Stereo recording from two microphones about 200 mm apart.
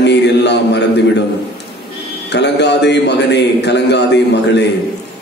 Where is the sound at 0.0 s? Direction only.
60° left (ahead or behind).